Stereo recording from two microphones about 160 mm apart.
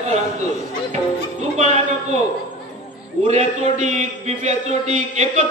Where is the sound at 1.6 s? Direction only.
45° right (ahead or behind).